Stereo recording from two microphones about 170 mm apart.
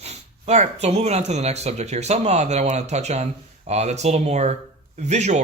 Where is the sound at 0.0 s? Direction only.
40° right (ahead or behind).